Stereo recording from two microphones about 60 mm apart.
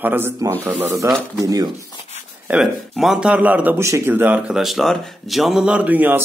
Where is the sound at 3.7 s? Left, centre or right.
Right.